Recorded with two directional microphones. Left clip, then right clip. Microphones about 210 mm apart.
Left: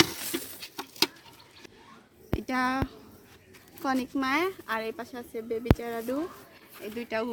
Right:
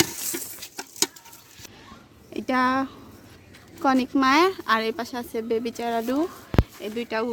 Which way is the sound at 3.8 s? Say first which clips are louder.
Right 8 dB; 35° right (ahead or behind).